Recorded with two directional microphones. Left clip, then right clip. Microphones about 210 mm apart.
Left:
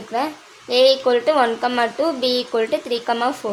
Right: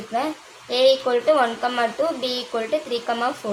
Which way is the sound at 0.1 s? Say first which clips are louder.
Left 2 dB; 40° left (ahead or behind).